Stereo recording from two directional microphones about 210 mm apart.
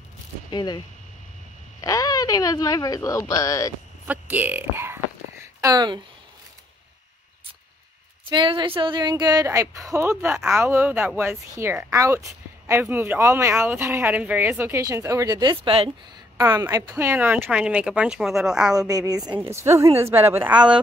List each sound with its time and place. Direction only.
0.5 s speech: 20° left (ahead or behind)
1.8 s speech: 15° left (ahead or behind)
4.1 s speech: 10° right (ahead or behind)
8.3 s speech: 20° right (ahead or behind)
16.3 s speech: 10° right (ahead or behind)
18.9 s speech: 15° right (ahead or behind)